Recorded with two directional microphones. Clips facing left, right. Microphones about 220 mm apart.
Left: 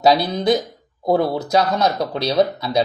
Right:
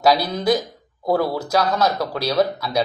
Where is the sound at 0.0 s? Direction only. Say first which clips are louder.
Left 2 dB; 25° left (ahead or behind).